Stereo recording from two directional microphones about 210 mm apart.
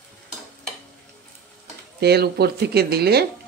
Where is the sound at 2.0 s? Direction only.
50° right (ahead or behind).